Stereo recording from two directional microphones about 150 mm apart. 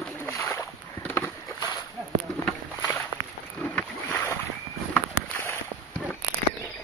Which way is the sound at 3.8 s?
15° left (ahead or behind).